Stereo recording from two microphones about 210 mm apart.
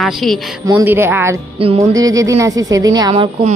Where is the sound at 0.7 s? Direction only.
15° right (ahead or behind).